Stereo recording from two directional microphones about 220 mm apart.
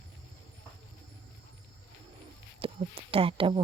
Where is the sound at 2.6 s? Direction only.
25° right (ahead or behind).